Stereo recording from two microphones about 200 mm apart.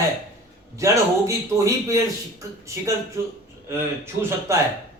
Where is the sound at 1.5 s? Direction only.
15° right (ahead or behind).